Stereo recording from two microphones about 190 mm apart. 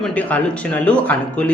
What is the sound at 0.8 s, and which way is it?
Speech, 5° left (ahead or behind).